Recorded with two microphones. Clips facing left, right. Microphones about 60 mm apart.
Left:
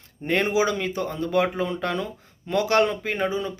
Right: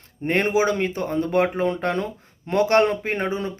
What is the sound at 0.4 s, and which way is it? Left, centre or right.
Speech, right.